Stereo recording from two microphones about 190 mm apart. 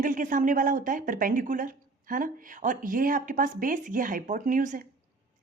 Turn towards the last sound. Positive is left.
turn(degrees=-45)  # may be behind; listen again after turning